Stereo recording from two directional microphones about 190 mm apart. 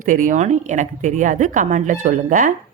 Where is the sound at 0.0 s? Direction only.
45° right (ahead or behind).